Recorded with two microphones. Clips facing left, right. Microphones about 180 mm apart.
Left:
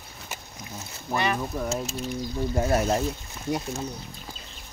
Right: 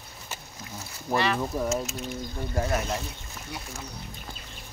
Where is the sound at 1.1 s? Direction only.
15° right (ahead or behind).